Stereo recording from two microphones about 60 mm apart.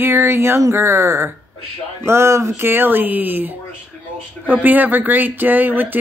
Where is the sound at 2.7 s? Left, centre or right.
Right.